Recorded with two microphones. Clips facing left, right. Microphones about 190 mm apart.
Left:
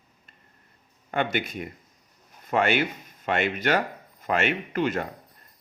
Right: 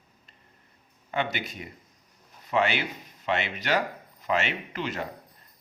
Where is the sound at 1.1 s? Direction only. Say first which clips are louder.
Left 4 dB; 50° left (ahead or behind).